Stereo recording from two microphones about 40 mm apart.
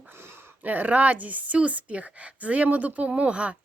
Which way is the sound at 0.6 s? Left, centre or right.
Right.